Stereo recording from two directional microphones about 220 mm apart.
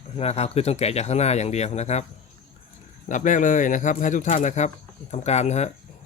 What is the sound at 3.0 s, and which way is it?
Speech, 35° left (ahead or behind).